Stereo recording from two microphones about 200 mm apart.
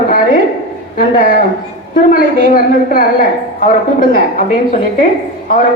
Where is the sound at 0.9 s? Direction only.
40° left (ahead or behind).